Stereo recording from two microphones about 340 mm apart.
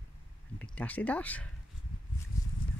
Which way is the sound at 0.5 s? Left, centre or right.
Centre.